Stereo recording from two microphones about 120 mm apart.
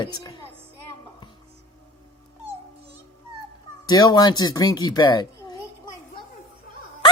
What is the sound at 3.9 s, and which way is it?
Speech, 35° left (ahead or behind).